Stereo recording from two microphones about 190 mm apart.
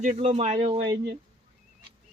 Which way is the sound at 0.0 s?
40° right (ahead or behind).